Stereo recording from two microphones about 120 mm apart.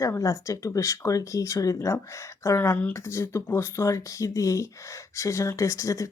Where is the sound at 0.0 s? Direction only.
25° left (ahead or behind).